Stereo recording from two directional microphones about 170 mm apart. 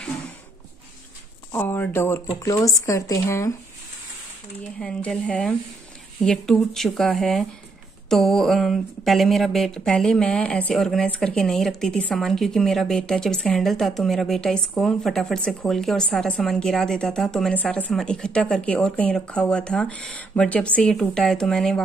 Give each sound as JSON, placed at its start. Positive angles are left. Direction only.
{"t": 1.5, "sound": "speech", "side_deg": 15}
{"t": 4.7, "sound": "speech", "side_deg": 5}